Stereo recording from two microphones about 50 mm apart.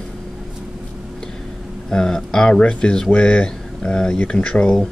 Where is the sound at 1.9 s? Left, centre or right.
Centre.